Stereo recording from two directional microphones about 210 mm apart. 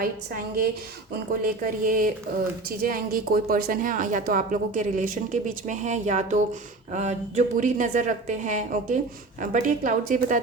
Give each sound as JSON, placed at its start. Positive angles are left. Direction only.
{"t": 0.0, "sound": "a woman's voice", "side_deg": -45}